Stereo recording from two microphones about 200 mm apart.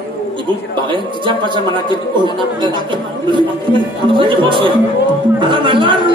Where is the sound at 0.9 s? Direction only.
25° right (ahead or behind).